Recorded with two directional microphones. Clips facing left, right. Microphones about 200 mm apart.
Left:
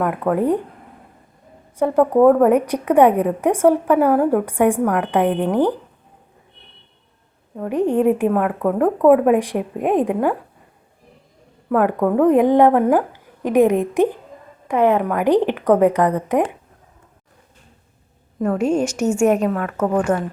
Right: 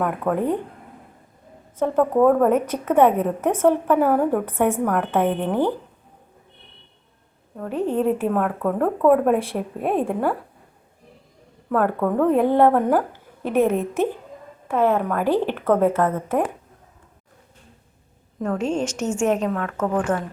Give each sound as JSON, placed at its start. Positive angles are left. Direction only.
{"t": 0.0, "sound": "speech", "side_deg": 5}
{"t": 1.7, "sound": "a woman's voice", "side_deg": 10}
{"t": 7.5, "sound": "a woman's voice", "side_deg": 15}
{"t": 11.7, "sound": "a woman's voice", "side_deg": 10}
{"t": 18.3, "sound": "a woman's voice", "side_deg": 10}